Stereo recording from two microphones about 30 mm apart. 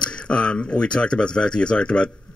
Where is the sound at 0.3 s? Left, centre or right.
Left.